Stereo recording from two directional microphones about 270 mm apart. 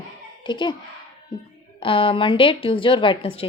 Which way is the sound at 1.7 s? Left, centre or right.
Centre.